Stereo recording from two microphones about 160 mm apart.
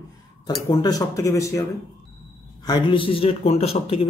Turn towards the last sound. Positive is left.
turn(degrees=35)  # may be behind; listen again after turning